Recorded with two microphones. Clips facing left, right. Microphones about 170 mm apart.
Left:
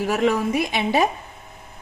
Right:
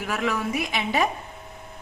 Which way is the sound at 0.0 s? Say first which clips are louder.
Left 7 dB; 25° left (ahead or behind).